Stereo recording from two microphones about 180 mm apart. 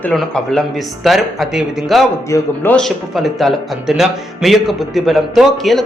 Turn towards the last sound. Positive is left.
turn(degrees=0)  # may be behind; listen again after turning